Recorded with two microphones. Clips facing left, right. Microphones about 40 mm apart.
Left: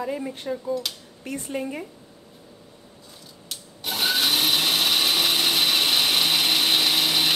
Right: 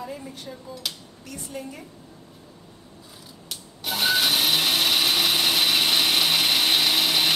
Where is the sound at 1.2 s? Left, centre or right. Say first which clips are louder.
Left 7 dB; left.